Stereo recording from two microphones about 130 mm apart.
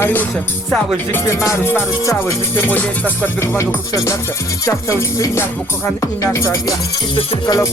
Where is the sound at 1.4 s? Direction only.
20° left (ahead or behind).